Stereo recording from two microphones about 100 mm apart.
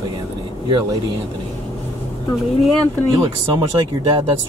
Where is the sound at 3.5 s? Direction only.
50° right (ahead or behind).